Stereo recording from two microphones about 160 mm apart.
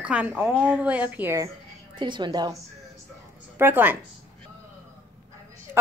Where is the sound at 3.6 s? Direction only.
15° right (ahead or behind).